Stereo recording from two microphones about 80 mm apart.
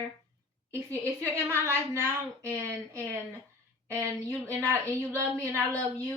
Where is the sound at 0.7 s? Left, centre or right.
Right.